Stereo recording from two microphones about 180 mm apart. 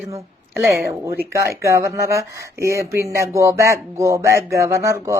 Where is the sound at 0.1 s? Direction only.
15° right (ahead or behind).